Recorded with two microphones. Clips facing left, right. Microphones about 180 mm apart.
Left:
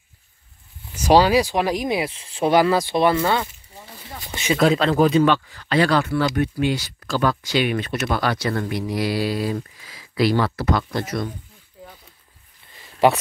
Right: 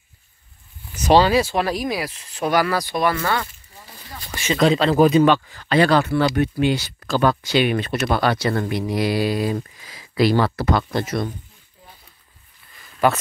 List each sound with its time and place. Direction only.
0.9 s speech: 10° left (ahead or behind)
4.1 s a sound: 20° left (ahead or behind)
4.6 s speech: centre (ahead or behind); by 5.4 s 15° right (ahead or behind)
5.9 s speech: 25° right (ahead or behind)
10.3 s speech: 35° right (ahead or behind)
12.7 s a sound: 25° left (ahead or behind)